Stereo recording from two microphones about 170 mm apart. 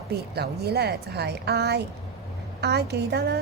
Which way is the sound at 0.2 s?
70° right (ahead or behind).